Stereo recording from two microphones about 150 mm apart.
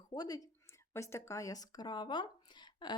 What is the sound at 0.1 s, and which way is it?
Speech, 25° left (ahead or behind).